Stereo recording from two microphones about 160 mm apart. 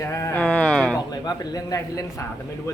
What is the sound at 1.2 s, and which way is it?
Speech, 25° left (ahead or behind).